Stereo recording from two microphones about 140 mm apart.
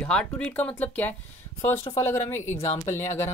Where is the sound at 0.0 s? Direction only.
10° left (ahead or behind).